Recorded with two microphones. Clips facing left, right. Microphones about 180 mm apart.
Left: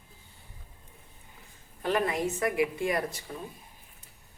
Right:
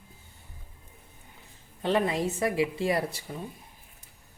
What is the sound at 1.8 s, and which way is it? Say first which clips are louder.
A woman's voice: right 2 dB; 25° right (ahead or behind).